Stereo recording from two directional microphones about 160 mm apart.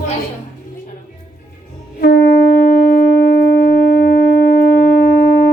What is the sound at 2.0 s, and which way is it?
Wind instrument, 75° left (ahead or behind).